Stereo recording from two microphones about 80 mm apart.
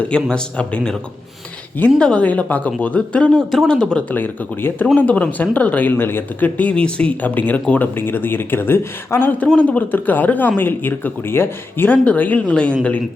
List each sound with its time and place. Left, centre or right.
0.1 s speech: centre
2.0 s speech: centre
3.3 s speech: centre
3.7 s speech: centre
4.1 s speech: left
9.6 s speech: centre